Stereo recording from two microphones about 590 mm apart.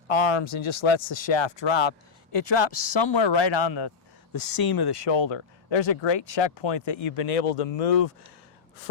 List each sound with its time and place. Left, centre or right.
0.1 s speech: left
4.3 s speech: left
6.9 s speech: left